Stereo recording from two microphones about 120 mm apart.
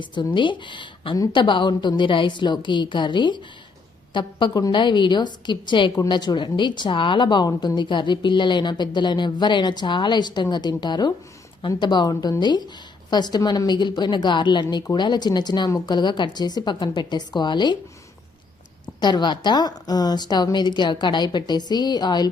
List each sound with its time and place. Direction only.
0.0 s a woman's voice: 40° left (ahead or behind)
18.9 s a woman's voice: 35° left (ahead or behind)